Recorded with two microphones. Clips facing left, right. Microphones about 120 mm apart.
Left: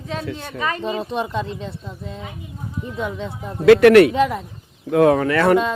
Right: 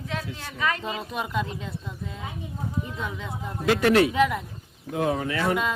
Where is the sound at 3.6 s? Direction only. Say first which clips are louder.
Left 10 dB; 70° left (ahead or behind).